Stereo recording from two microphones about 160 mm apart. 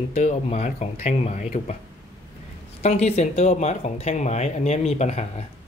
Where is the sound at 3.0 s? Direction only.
45° left (ahead or behind).